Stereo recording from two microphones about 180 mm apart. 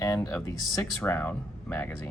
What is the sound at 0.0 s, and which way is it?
Speech, 15° left (ahead or behind).